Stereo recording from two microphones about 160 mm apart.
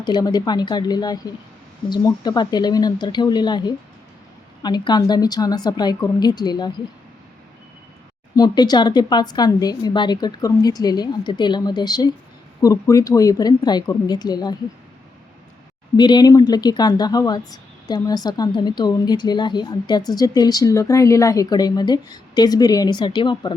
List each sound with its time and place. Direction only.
0.0 s speech: 25° left (ahead or behind)
8.4 s speech: 25° left (ahead or behind)
16.0 s speech: 25° left (ahead or behind)